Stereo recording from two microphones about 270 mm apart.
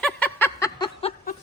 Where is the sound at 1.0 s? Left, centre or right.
Left.